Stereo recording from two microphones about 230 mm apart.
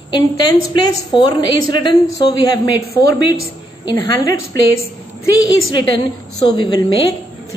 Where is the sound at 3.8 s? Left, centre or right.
Centre.